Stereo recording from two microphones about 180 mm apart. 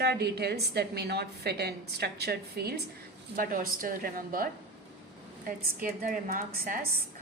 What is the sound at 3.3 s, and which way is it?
A woman's voice, 50° right (ahead or behind).